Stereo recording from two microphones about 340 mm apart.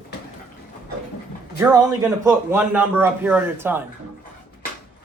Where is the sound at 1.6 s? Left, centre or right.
Centre.